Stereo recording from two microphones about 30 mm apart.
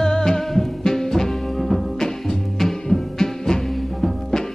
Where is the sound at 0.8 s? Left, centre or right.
Centre.